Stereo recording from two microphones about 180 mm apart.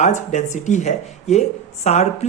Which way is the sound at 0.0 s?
40° left (ahead or behind).